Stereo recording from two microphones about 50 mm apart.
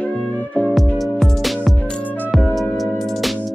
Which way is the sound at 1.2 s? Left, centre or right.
Centre.